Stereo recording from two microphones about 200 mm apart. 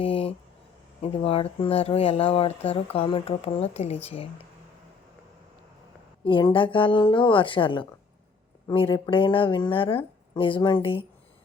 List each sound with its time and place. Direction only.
0.0 s speech: 25° left (ahead or behind)
6.2 s speech: 25° left (ahead or behind)